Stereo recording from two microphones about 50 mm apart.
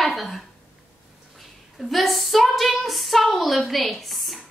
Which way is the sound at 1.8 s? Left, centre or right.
Centre.